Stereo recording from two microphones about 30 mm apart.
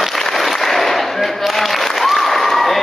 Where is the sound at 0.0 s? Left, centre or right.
Centre.